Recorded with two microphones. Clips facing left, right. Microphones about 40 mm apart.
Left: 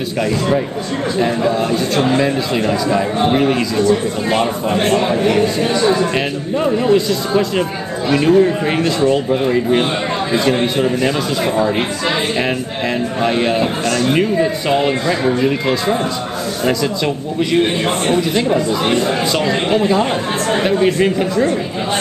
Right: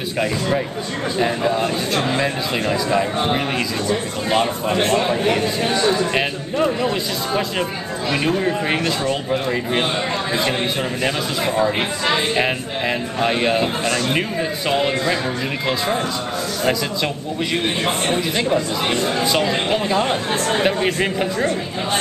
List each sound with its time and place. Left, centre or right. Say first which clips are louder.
1.2 s a man's voice: left 2 dB; centre
4.8 s a man's voice: left 4 dB; centre
5.1 s a man's voice: left 4 dB; centre
12.4 s speech: left 2 dB; centre
16.6 s a man's voice: left 4 dB; centre
20.8 s a man's voice: left 5 dB; centre